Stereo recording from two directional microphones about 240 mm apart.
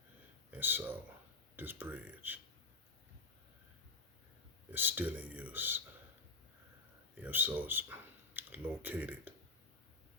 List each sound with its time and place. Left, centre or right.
0.5 s speech: centre
4.7 s speech: centre
7.2 s speech: centre